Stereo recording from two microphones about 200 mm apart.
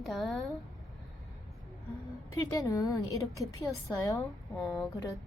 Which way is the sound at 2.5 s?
15° left (ahead or behind).